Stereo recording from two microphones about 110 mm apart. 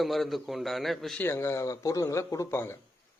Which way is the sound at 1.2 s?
25° left (ahead or behind).